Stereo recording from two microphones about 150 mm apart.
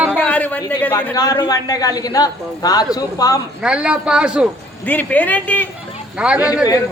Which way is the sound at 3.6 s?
5° right (ahead or behind).